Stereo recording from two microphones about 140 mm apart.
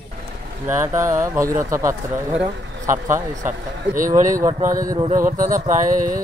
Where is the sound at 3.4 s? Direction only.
75° right (ahead or behind).